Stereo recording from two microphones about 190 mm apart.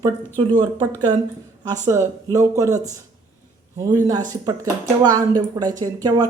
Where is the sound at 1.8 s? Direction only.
15° right (ahead or behind).